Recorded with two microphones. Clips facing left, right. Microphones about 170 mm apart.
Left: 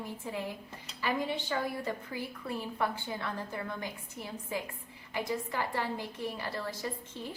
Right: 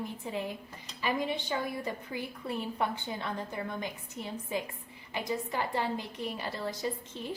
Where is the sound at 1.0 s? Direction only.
20° right (ahead or behind).